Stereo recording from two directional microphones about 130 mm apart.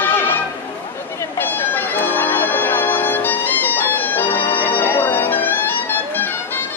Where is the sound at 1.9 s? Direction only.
15° left (ahead or behind).